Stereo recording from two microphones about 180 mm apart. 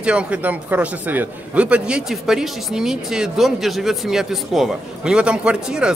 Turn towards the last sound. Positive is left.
turn(degrees=-5)  # may be behind; listen again after turning